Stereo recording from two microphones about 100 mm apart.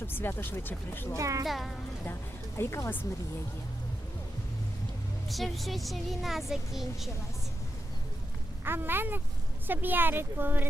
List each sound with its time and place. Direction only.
0.1 s speech: 20° left (ahead or behind)
1.1 s a child's voice: 35° right (ahead or behind)
1.5 s a woman's voice: centre (ahead or behind)
2.6 s speech: 25° left (ahead or behind)
5.3 s a woman's voice: centre (ahead or behind)
8.6 s speech: 20° right (ahead or behind)